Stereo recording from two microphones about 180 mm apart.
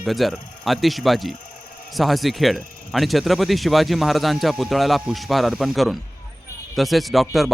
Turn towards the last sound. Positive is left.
turn(degrees=0)  # may be behind; listen again after turning